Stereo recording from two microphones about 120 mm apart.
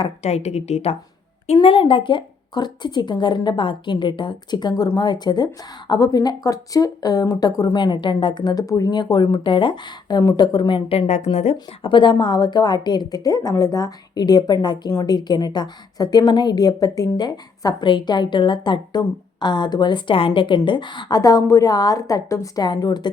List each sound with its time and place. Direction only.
0.2 s a woman's voice: 65° left (ahead or behind)
1.6 s a woman's voice: 50° left (ahead or behind)
11.5 s a woman's voice: 40° left (ahead or behind)